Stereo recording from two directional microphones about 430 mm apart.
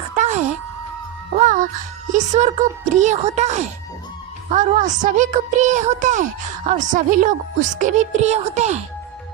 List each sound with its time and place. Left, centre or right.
0.2 s music: centre
2.1 s speech: centre